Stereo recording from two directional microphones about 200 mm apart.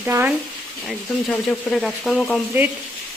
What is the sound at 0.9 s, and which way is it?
Speech, centre (ahead or behind).